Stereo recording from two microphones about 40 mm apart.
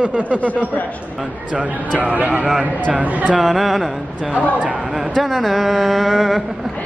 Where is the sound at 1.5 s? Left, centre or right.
Right.